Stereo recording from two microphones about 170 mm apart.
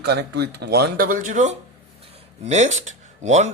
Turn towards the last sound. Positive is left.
turn(degrees=-45)  # may be behind; listen again after turning